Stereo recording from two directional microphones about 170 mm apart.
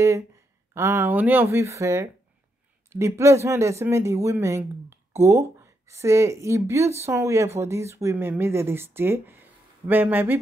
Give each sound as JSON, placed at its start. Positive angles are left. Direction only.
{"t": 0.7, "sound": "speech", "side_deg": -15}